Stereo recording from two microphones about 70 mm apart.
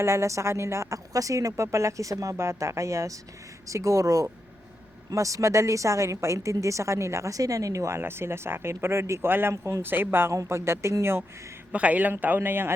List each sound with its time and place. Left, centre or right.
0.0 s a woman's voice: right
2.3 s a woman's voice: right
11.7 s a man's voice: centre